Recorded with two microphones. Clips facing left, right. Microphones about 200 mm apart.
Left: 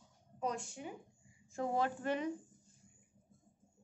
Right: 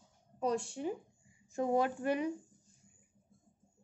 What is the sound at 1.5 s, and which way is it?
Speech, 20° right (ahead or behind).